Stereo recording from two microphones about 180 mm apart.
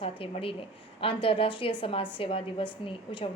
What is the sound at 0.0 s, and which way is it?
A woman's voice, 30° left (ahead or behind).